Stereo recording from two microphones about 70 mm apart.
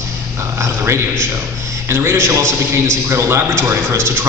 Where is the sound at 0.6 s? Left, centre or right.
Right.